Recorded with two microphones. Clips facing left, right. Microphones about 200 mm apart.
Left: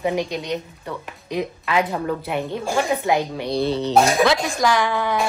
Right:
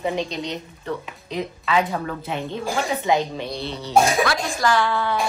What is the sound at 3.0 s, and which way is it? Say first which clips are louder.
Speech: left 1 dB; 10° left (ahead or behind).